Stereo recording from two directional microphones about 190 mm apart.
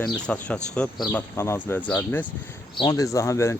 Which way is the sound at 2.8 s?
20° left (ahead or behind).